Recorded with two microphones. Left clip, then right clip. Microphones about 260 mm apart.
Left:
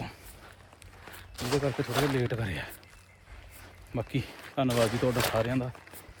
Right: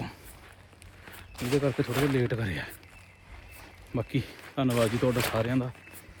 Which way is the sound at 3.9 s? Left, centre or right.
Centre.